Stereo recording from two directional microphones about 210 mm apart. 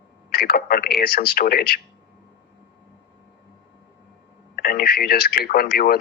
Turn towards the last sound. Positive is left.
turn(degrees=45)  # may be behind; listen again after turning